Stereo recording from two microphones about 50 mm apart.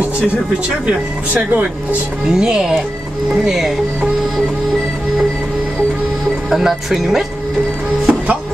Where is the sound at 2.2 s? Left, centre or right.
Centre.